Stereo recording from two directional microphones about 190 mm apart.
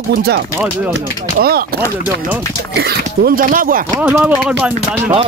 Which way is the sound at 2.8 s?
55° right (ahead or behind).